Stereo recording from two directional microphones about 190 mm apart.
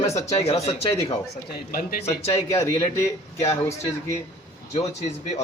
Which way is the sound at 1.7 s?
50° left (ahead or behind).